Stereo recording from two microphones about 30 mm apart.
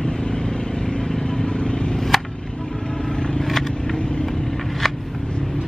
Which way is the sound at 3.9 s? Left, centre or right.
Left.